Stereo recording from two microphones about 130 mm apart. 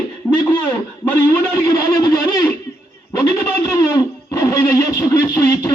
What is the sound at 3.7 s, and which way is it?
Guitar, 25° left (ahead or behind).